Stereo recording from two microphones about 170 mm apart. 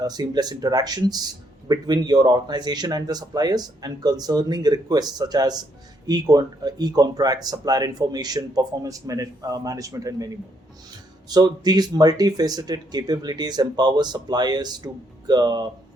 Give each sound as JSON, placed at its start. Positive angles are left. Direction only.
{"t": 0.0, "sound": "speech", "side_deg": -25}